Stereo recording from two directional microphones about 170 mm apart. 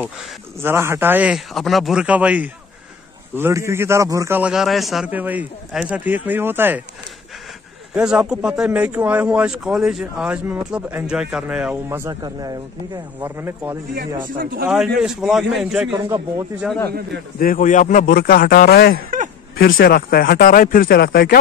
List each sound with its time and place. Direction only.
0.6 s speech: 15° right (ahead or behind)
7.9 s speech: 5° right (ahead or behind)
14.2 s a man's voice: 55° right (ahead or behind)
15.0 s speech: 5° right (ahead or behind)
17.4 s speech: 55° left (ahead or behind)
19.0 s a sound: 50° right (ahead or behind)
19.5 s speech: 60° left (ahead or behind)